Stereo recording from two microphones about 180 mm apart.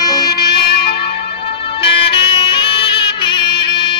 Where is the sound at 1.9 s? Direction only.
30° left (ahead or behind).